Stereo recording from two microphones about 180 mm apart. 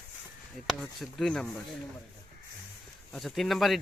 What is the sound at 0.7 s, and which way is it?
Speech, 5° left (ahead or behind).